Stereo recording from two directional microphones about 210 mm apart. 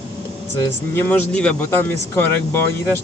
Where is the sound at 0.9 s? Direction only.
10° left (ahead or behind).